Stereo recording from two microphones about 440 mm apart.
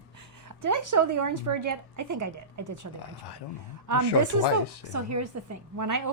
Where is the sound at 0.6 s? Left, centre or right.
Right.